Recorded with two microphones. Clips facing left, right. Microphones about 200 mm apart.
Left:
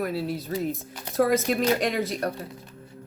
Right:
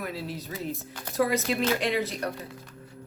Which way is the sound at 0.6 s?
15° left (ahead or behind).